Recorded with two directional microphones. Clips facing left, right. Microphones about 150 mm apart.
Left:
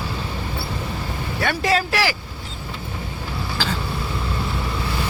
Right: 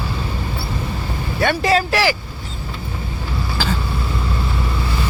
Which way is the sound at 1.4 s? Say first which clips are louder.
Right 4 dB; 25° right (ahead or behind).